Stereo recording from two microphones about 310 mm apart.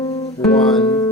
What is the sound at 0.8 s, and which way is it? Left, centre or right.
Music, centre.